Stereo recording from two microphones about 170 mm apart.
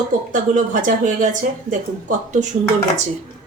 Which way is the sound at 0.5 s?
50° right (ahead or behind).